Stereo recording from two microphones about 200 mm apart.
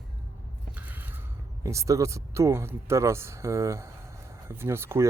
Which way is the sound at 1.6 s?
15° right (ahead or behind).